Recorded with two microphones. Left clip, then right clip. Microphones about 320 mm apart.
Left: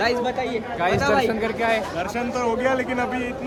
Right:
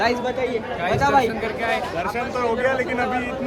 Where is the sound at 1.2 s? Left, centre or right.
Left.